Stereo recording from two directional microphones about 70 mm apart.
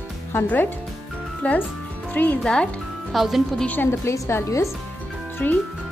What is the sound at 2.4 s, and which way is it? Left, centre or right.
Speech, centre.